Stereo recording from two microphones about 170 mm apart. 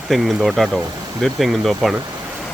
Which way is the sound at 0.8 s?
25° right (ahead or behind).